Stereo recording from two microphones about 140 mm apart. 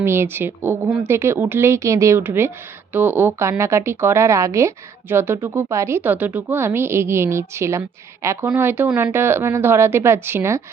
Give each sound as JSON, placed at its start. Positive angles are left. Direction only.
{"t": 0.0, "sound": "a woman's voice", "side_deg": -15}